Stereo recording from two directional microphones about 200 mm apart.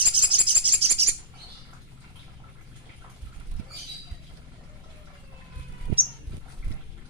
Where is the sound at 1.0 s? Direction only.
30° right (ahead or behind).